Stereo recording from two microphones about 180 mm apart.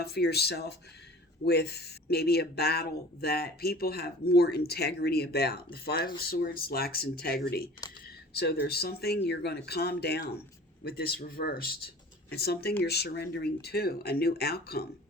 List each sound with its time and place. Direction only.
0.0 s speech: 65° left (ahead or behind)